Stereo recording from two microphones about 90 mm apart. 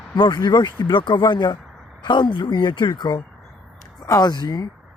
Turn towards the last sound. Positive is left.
turn(degrees=50)  # may be behind; listen again after turning